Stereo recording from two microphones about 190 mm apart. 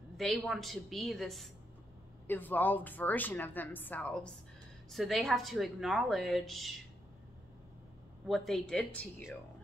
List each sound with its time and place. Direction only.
0.2 s a woman's voice: centre (ahead or behind)
8.3 s a woman's voice: centre (ahead or behind)